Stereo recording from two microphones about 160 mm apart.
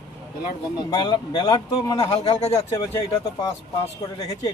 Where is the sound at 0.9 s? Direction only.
30° left (ahead or behind).